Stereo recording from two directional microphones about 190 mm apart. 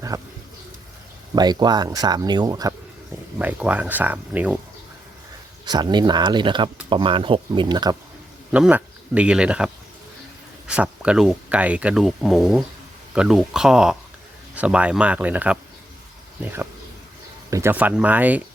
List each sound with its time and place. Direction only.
0.1 s bird: 15° right (ahead or behind)
1.4 s speech: 20° right (ahead or behind)
3.3 s speech: 10° right (ahead or behind)
5.6 s speech: 20° right (ahead or behind)
8.5 s speech: 5° right (ahead or behind)
10.7 s speech: 5° right (ahead or behind)
17.5 s speech: 10° right (ahead or behind)